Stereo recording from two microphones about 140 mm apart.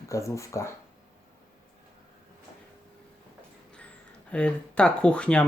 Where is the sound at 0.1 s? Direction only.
20° left (ahead or behind).